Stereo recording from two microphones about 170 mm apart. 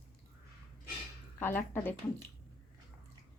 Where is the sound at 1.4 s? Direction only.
10° left (ahead or behind).